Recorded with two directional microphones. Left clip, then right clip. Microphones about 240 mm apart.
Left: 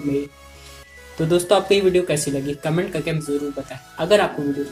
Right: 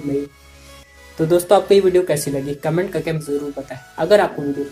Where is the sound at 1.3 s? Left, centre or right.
Centre.